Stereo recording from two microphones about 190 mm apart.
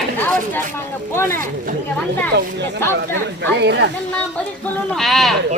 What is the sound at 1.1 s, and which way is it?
Chop, 15° left (ahead or behind).